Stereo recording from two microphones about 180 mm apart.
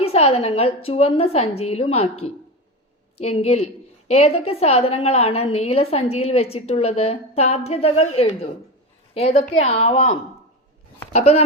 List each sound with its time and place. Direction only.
0.0 s a woman's voice: 35° left (ahead or behind)
9.6 s a woman's voice: 35° left (ahead or behind)